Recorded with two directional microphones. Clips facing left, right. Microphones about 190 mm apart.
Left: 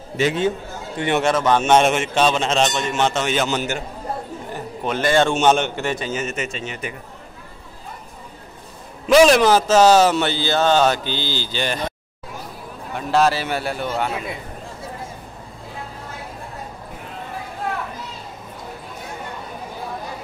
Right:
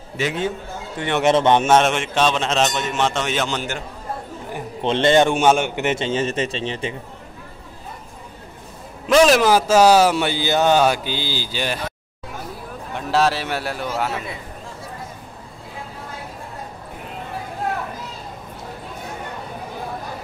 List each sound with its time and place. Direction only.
1.2 s speech: 25° right (ahead or behind)
1.6 s a man's voice: centre (ahead or behind)
4.8 s a man's voice: 25° right (ahead or behind); by 5.9 s 10° right (ahead or behind)
5.9 s speech: 25° right (ahead or behind)
9.0 s a man's voice: centre (ahead or behind)
12.9 s a man's voice: centre (ahead or behind)